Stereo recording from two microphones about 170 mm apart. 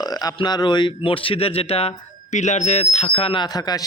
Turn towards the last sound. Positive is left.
turn(degrees=25)  # may be behind; listen again after turning